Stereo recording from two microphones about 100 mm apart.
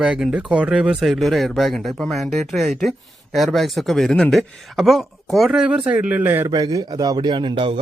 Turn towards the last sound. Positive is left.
turn(degrees=-60)  # may be behind; listen again after turning